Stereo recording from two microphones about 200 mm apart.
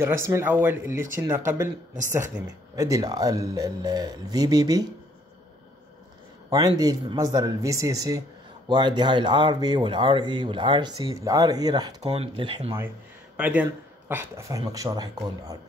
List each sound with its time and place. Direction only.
0.0 s speech: 15° right (ahead or behind)
6.5 s speech: 20° right (ahead or behind)
12.0 s speech: 30° right (ahead or behind)
13.4 s speech: 5° right (ahead or behind)